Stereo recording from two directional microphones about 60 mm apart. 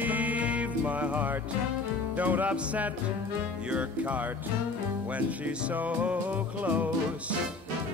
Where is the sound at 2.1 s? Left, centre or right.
Right.